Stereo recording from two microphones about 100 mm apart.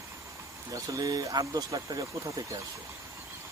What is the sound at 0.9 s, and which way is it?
Speech, 40° right (ahead or behind).